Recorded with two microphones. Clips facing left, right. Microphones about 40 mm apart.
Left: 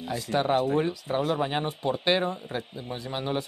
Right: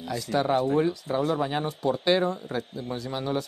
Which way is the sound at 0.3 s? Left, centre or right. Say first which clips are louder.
Even; left.